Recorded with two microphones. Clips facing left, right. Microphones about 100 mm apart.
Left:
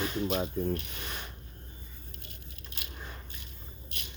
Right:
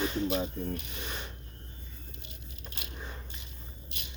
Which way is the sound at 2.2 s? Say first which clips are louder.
Right 1 dB; 25° right (ahead or behind).